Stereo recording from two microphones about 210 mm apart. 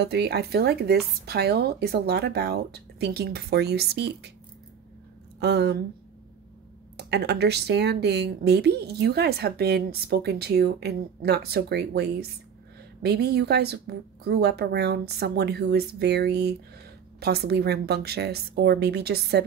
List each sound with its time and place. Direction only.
0.0 s speech: 50° right (ahead or behind)
5.4 s speech: 55° right (ahead or behind)
7.0 s speech: 50° right (ahead or behind)